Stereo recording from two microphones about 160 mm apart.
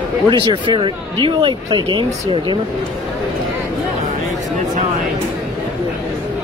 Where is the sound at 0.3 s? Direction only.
30° right (ahead or behind).